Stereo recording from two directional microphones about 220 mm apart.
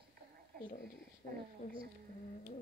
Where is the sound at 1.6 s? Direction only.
35° left (ahead or behind).